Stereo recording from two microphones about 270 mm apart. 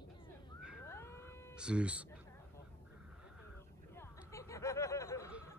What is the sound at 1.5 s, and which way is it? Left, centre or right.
Speech, centre.